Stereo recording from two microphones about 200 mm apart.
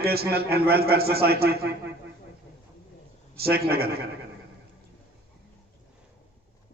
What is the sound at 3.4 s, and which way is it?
Speech, 50° right (ahead or behind).